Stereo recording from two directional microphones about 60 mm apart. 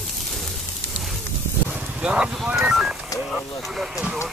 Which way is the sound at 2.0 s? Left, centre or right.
Centre.